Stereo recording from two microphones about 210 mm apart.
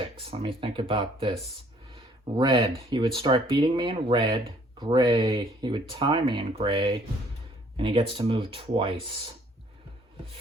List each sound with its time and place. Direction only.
0.3 s speech: 25° right (ahead or behind)
2.3 s speech: 15° right (ahead or behind)